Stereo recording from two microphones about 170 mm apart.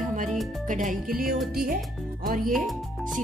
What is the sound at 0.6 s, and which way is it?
Music, 50° right (ahead or behind).